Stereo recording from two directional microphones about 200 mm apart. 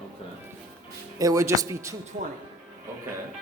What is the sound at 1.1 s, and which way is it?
Speech, 15° right (ahead or behind).